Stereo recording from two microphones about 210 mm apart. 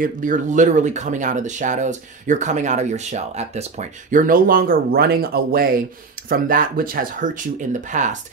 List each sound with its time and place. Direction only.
0.0 s speech: 40° right (ahead or behind)